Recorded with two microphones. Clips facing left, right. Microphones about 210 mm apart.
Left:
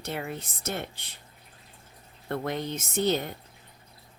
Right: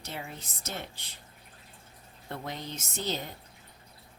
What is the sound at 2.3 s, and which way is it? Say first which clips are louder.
A woman's voice: left 8 dB; 60° left (ahead or behind).